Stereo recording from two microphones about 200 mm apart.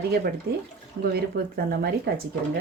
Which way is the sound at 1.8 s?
50° right (ahead or behind).